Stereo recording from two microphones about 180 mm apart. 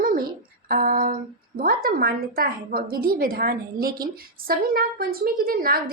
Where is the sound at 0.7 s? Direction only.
55° right (ahead or behind).